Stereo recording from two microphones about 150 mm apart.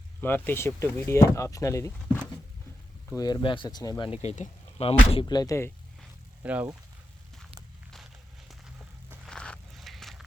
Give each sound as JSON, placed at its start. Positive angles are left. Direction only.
{"t": 0.2, "sound": "speech", "side_deg": 15}
{"t": 3.2, "sound": "speech", "side_deg": 25}
{"t": 4.3, "sound": "speech", "side_deg": 45}
{"t": 5.3, "sound": "speech", "side_deg": 25}
{"t": 6.4, "sound": "speech", "side_deg": -10}
{"t": 9.2, "sound": "a sound", "side_deg": 5}